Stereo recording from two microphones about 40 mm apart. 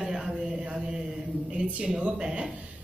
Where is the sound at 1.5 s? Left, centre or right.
Right.